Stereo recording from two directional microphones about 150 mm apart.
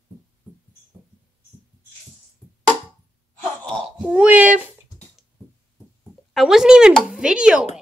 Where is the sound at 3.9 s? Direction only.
10° right (ahead or behind).